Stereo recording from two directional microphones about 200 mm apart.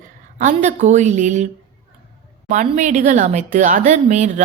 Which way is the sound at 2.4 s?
35° right (ahead or behind).